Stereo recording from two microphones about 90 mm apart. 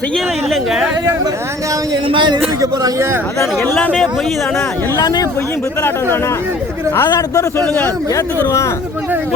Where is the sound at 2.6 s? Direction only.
45° right (ahead or behind).